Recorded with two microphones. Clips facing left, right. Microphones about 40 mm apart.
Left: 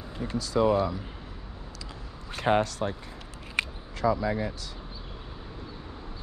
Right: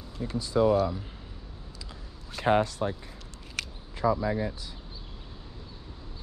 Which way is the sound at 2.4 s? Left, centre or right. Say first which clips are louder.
Even; left.